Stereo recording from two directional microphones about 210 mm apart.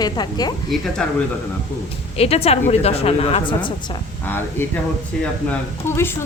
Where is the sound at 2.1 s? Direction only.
30° left (ahead or behind).